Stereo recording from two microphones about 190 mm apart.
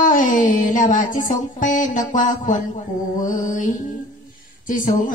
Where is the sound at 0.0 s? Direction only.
45° left (ahead or behind).